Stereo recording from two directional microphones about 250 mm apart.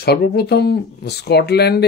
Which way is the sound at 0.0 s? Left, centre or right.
Left.